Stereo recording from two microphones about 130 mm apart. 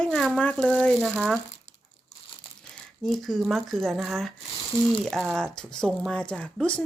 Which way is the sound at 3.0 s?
Centre (ahead or behind).